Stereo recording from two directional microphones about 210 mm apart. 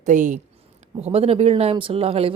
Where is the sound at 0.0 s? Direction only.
35° right (ahead or behind).